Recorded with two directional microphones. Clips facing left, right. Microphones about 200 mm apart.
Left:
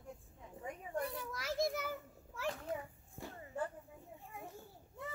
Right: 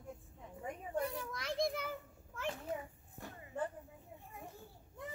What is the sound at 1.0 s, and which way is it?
Children playing, 5° left (ahead or behind).